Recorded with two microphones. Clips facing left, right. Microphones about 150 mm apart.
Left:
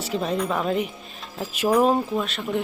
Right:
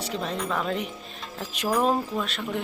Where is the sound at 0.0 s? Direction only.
5° left (ahead or behind).